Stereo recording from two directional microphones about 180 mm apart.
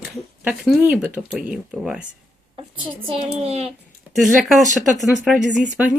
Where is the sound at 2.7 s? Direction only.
25° right (ahead or behind).